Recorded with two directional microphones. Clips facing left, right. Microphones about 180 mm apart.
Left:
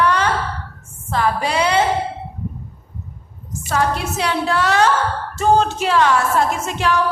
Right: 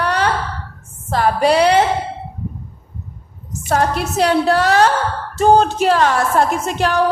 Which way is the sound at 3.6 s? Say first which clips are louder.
Right 3 dB; 50° right (ahead or behind).